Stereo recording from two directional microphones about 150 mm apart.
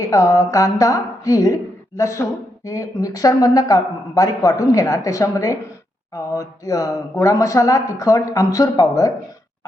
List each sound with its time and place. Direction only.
0.0 s speech: 20° left (ahead or behind)